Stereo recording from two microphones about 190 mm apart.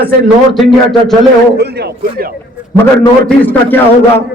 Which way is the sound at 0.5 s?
Centre (ahead or behind).